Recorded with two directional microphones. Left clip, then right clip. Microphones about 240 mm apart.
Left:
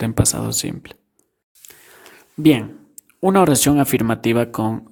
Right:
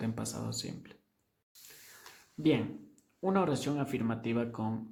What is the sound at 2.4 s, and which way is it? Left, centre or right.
Speech, left.